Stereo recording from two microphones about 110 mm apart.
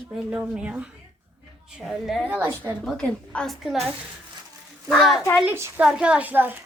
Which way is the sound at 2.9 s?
10° left (ahead or behind).